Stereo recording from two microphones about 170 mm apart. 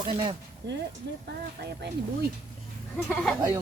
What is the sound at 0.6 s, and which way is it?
Speech, 90° right.